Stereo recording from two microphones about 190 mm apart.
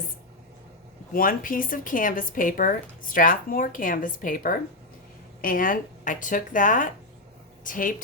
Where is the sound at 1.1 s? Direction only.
45° left (ahead or behind).